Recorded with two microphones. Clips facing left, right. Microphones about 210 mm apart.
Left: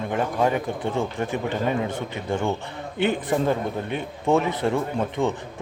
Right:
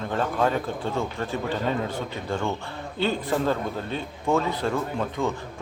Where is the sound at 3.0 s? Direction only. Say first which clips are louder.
Left 2 dB; 20° left (ahead or behind).